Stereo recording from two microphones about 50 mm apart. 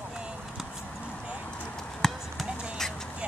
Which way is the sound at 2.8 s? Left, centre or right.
Centre.